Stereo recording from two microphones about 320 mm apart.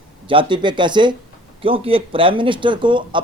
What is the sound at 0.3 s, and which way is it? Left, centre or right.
Speech, centre.